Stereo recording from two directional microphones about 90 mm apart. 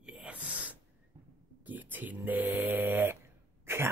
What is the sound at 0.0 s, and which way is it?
Gasp, 15° right (ahead or behind).